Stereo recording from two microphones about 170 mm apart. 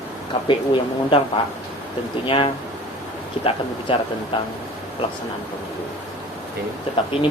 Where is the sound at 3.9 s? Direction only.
30° left (ahead or behind).